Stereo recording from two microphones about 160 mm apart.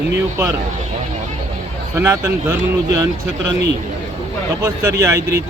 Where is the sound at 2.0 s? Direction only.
15° right (ahead or behind).